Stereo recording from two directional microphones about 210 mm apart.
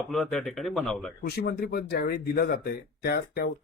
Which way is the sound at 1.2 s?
45° left (ahead or behind).